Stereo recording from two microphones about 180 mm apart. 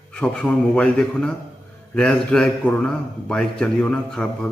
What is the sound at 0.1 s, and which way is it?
A man's voice, 5° left (ahead or behind).